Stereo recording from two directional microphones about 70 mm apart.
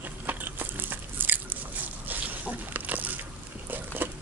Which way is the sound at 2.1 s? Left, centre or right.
Right.